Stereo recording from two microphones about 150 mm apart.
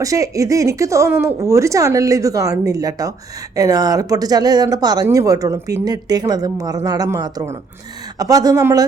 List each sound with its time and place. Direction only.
0.0 s a woman's voice: 20° right (ahead or behind)